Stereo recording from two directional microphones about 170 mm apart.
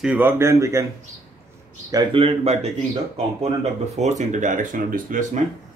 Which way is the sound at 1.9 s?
30° right (ahead or behind).